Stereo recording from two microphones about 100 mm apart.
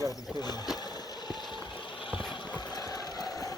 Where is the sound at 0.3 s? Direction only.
45° left (ahead or behind).